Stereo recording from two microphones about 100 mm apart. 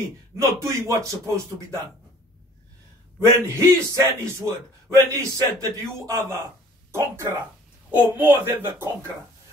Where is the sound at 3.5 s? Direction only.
25° right (ahead or behind).